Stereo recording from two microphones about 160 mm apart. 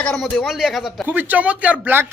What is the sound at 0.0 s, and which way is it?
A man's voice, 5° left (ahead or behind).